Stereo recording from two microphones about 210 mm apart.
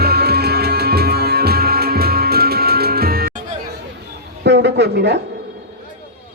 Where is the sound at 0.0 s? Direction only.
50° right (ahead or behind).